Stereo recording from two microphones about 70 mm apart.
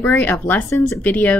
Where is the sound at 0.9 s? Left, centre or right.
Left.